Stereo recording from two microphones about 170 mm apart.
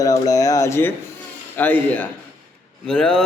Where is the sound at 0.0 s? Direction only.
20° left (ahead or behind).